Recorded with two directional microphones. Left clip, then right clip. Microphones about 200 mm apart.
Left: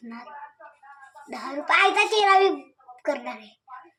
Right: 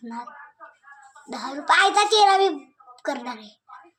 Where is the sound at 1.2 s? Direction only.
10° right (ahead or behind).